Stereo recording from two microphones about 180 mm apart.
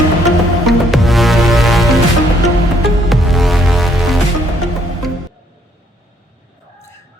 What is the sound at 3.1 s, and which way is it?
Music, centre (ahead or behind).